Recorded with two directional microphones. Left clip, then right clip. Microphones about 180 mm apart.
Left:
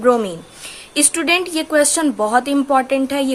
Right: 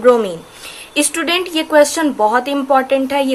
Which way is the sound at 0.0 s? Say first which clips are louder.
Right 4 dB; 25° left (ahead or behind).